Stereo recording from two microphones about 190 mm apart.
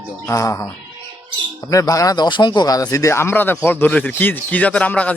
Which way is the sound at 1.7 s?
20° left (ahead or behind).